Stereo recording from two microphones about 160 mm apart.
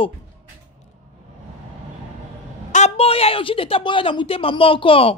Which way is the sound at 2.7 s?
40° left (ahead or behind).